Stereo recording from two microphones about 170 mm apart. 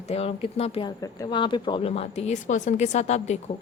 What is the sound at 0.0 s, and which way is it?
Speech, 35° left (ahead or behind).